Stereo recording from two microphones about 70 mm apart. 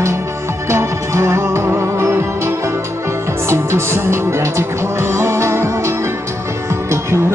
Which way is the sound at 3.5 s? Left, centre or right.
Right.